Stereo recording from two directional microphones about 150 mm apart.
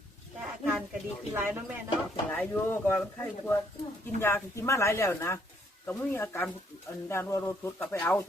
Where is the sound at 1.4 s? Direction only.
15° right (ahead or behind).